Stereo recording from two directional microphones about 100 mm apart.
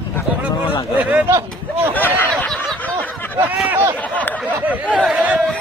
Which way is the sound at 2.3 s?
5° left (ahead or behind).